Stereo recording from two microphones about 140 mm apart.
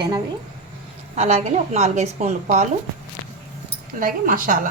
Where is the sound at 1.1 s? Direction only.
55° right (ahead or behind).